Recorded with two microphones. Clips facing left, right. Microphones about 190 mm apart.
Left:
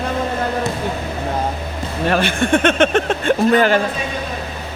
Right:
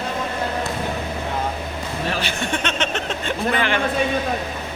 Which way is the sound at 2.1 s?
55° left (ahead or behind).